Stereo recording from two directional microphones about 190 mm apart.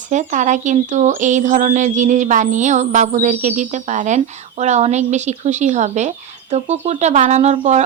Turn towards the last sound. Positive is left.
turn(degrees=-35)  # may be behind; listen again after turning